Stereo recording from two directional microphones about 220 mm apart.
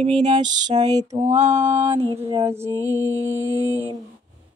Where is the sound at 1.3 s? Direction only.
10° right (ahead or behind).